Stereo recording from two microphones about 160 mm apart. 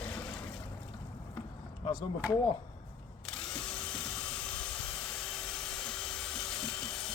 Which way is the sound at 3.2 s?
5° left (ahead or behind).